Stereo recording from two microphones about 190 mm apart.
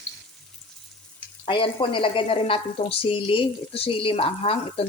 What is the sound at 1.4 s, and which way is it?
Frying, 25° left (ahead or behind).